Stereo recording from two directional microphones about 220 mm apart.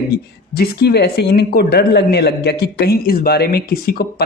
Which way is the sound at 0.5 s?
45° left (ahead or behind).